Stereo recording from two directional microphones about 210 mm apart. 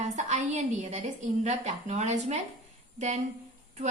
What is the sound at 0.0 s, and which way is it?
A woman's voice, 35° right (ahead or behind).